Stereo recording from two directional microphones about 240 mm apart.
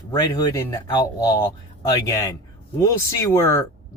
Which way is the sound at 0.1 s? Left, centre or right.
Centre.